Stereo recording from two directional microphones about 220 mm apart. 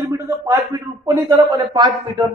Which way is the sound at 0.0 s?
15° right (ahead or behind).